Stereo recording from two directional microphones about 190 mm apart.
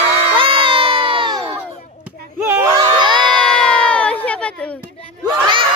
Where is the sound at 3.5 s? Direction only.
5° left (ahead or behind).